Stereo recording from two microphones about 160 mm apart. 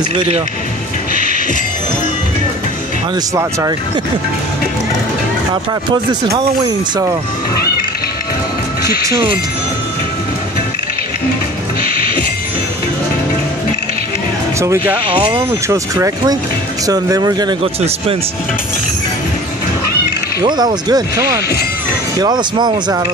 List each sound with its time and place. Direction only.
5.9 s speech: 20° right (ahead or behind)
11.8 s music: 65° left (ahead or behind)
14.6 s speech: 15° right (ahead or behind)
17.7 s speech: 40° right (ahead or behind)
20.3 s speech: 25° right (ahead or behind)